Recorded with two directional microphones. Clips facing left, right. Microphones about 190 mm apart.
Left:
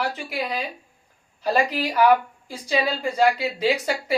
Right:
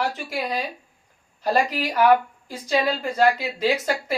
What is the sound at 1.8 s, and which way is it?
Speech, 10° left (ahead or behind).